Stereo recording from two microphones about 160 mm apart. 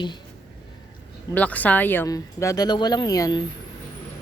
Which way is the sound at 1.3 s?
10° left (ahead or behind).